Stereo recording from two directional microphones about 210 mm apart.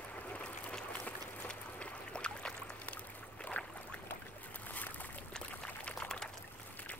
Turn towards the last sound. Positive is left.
turn(degrees=5)  # may be behind; listen again after turning